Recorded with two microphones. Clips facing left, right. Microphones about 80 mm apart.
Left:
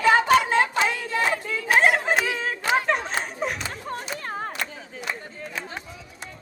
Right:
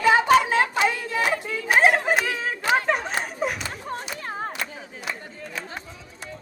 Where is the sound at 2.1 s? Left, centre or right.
Centre.